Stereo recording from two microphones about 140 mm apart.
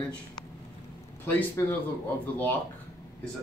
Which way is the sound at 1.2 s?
15° left (ahead or behind).